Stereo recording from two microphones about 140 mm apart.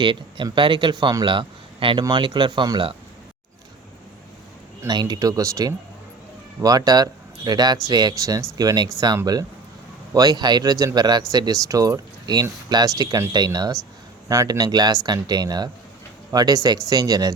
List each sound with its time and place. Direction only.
0.0 s a man's voice: 35° right (ahead or behind)
4.8 s speech: 30° right (ahead or behind)